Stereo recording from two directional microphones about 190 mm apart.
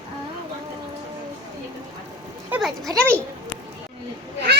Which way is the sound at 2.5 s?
5° right (ahead or behind).